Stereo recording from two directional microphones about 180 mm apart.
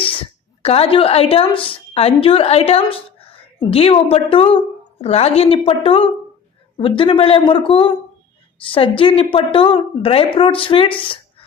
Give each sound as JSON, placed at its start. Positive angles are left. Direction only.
{"t": 0.0, "sound": "a woman's voice", "side_deg": 30}